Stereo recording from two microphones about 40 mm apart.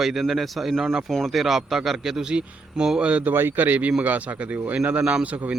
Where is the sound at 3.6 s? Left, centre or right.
Right.